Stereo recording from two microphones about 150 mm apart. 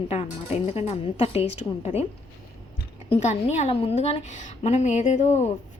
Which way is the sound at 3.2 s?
50° left (ahead or behind).